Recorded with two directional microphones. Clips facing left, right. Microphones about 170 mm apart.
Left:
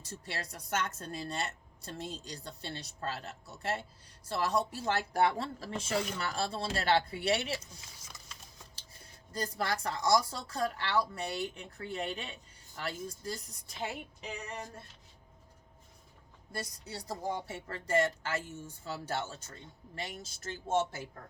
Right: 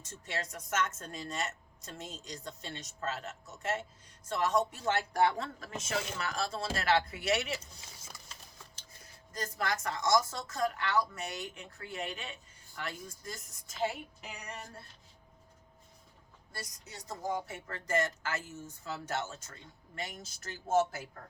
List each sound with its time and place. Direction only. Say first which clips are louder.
0.0 s a woman's voice: right 2 dB; 35° left (ahead or behind)
9.3 s a woman's voice: left 1 dB; 35° left (ahead or behind)
16.8 s a woman's voice: even; 35° left (ahead or behind)